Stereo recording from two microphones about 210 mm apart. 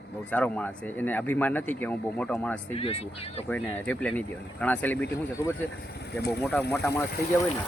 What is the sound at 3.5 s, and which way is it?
Speech, 5° left (ahead or behind).